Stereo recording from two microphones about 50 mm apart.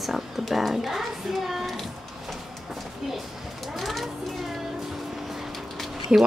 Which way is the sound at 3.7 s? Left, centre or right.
Centre.